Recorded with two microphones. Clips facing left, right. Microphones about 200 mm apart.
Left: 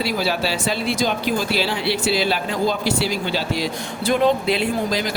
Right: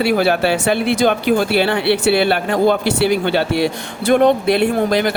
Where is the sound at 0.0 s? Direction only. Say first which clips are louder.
Right 7 dB; 60° right (ahead or behind).